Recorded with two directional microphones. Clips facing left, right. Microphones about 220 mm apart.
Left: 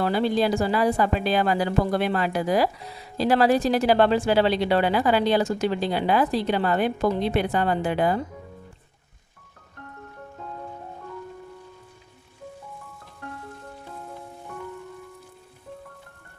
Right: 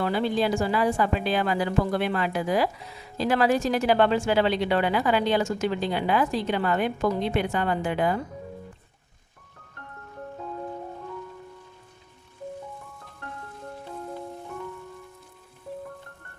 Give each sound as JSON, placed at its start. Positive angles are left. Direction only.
{"t": 0.0, "sound": "a woman's voice", "side_deg": 35}